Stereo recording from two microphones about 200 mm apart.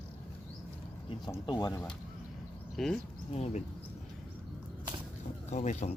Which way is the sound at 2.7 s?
Centre (ahead or behind).